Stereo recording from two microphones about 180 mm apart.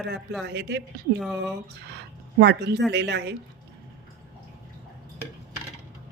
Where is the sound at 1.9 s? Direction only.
70° right (ahead or behind).